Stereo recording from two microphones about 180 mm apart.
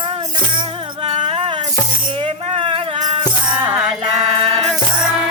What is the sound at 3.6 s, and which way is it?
Music, 10° right (ahead or behind).